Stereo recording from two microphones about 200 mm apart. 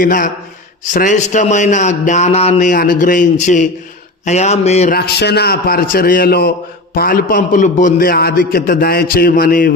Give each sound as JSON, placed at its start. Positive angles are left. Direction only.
{"t": 0.0, "sound": "a man's voice", "side_deg": 40}
{"t": 4.9, "sound": "a man's voice", "side_deg": 55}